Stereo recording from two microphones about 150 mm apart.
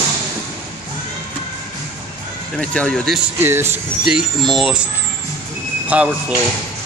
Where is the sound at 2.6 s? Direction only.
5° left (ahead or behind).